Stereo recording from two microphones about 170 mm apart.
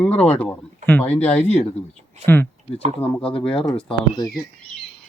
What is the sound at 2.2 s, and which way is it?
Speech, 40° right (ahead or behind).